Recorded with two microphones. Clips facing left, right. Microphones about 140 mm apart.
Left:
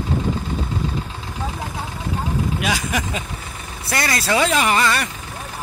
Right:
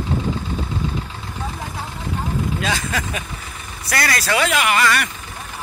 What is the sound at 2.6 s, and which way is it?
Speech, 10° left (ahead or behind).